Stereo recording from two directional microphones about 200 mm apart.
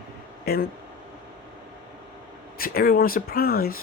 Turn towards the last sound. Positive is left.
turn(degrees=50)  # may be behind; listen again after turning